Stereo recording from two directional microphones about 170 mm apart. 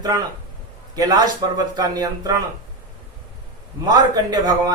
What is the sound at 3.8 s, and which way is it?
Speech, 25° right (ahead or behind).